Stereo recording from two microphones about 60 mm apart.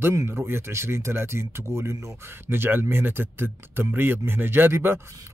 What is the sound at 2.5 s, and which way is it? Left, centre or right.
Speech, right.